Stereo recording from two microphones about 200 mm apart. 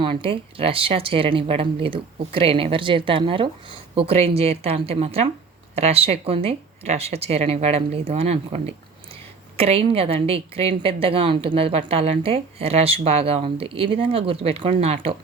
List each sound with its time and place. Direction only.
0.0 s speech: 25° right (ahead or behind)